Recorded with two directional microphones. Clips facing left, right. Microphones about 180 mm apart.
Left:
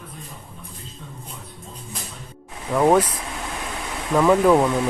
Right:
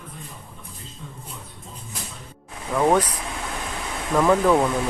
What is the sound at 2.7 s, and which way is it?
Speech, 5° left (ahead or behind).